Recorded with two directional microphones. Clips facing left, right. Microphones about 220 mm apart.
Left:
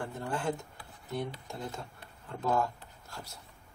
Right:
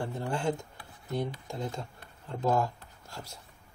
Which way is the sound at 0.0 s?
25° right (ahead or behind).